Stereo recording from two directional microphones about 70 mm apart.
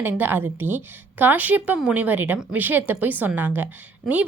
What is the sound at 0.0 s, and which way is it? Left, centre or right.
A woman's voice, right.